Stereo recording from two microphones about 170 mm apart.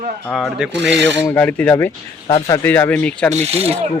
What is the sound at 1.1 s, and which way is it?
Speech, 10° left (ahead or behind).